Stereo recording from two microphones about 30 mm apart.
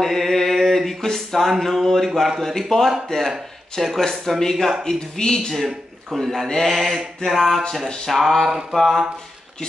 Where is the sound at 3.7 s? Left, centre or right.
Centre.